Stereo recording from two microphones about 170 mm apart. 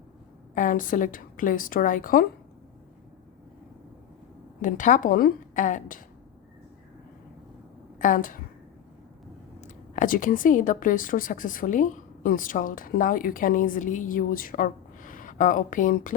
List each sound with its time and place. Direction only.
0.5 s a woman's voice: 50° left (ahead or behind)
4.6 s a woman's voice: 50° left (ahead or behind)
7.9 s a woman's voice: 50° left (ahead or behind)
9.6 s a woman's voice: 45° left (ahead or behind)